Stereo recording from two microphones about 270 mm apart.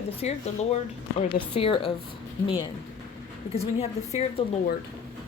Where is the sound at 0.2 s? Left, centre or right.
Left.